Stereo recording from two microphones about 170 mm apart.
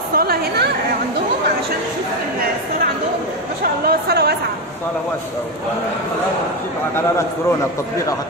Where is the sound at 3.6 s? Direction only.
65° right (ahead or behind).